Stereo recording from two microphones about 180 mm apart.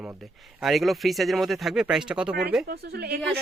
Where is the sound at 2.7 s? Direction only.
65° right (ahead or behind).